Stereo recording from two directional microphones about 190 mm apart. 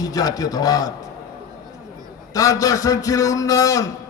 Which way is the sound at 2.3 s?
20° left (ahead or behind).